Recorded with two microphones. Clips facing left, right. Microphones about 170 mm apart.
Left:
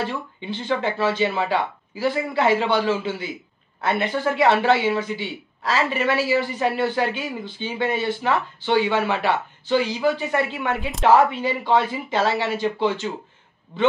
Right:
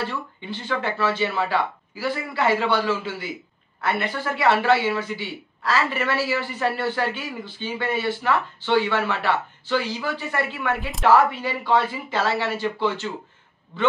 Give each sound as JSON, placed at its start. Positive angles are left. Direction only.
{"t": 0.0, "sound": "speech", "side_deg": 20}